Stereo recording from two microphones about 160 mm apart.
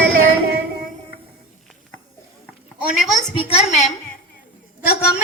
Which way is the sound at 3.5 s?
45° left (ahead or behind).